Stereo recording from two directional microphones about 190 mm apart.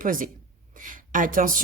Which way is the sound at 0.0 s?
45° right (ahead or behind).